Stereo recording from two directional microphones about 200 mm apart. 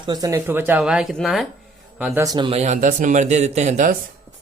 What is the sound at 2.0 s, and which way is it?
Speech, 15° right (ahead or behind).